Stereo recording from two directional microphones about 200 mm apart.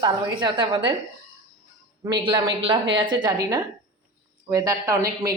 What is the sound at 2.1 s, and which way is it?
A woman's voice, 25° right (ahead or behind).